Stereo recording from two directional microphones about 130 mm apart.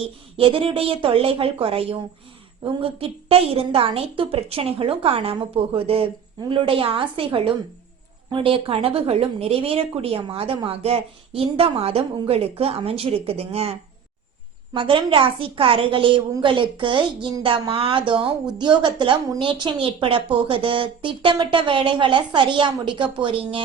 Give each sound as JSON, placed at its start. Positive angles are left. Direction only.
{"t": 0.3, "sound": "a woman's voice", "side_deg": -45}
{"t": 14.7, "sound": "a woman's voice", "side_deg": -40}